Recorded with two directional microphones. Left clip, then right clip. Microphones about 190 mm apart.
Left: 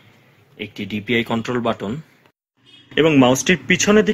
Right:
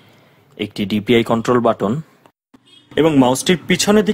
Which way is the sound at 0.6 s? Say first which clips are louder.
Right 6 dB; 60° right (ahead or behind).